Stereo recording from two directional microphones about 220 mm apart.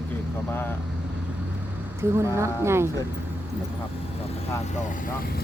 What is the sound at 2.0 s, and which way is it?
Speech, 10° right (ahead or behind).